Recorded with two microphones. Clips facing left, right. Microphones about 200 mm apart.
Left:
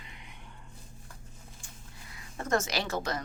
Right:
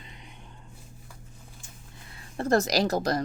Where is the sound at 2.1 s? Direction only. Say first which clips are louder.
Right 6 dB; 35° right (ahead or behind).